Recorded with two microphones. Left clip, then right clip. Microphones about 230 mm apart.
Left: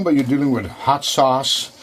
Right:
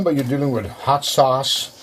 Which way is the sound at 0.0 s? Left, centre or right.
Left.